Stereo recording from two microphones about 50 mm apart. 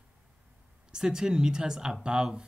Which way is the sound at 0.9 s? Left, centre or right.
Centre.